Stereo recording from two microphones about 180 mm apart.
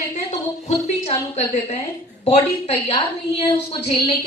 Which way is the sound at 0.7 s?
40° left (ahead or behind).